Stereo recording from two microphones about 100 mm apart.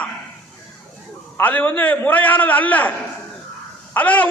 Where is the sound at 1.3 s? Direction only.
15° left (ahead or behind).